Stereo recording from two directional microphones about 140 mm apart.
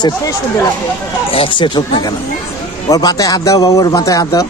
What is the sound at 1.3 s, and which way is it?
A man's voice, 40° left (ahead or behind).